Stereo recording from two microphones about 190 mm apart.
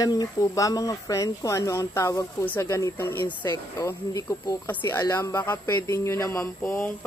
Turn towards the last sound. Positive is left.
turn(degrees=10)  # may be behind; listen again after turning